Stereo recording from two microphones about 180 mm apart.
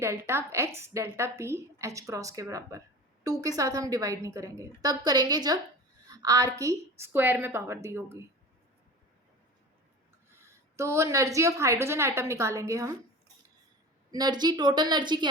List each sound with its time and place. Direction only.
0.0 s a woman's voice: 15° right (ahead or behind)
10.3 s a woman's voice: 15° right (ahead or behind)
14.1 s a woman's voice: 25° right (ahead or behind)